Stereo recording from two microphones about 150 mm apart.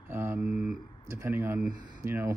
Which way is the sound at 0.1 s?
15° right (ahead or behind).